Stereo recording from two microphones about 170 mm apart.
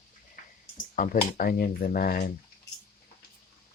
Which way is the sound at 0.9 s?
55° left (ahead or behind).